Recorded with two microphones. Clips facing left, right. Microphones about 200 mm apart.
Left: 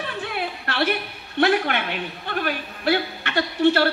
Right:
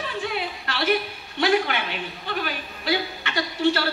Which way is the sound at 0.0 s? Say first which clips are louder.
Even; 60° left (ahead or behind).